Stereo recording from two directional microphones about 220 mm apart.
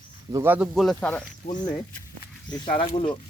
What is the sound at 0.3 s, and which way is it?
Speech, 10° right (ahead or behind).